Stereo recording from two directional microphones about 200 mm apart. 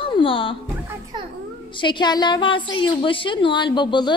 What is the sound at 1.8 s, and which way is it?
A woman's voice, 25° left (ahead or behind).